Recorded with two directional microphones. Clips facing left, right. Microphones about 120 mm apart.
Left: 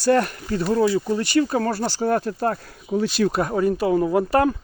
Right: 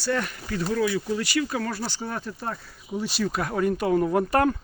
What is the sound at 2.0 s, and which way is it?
Speech, 50° left (ahead or behind).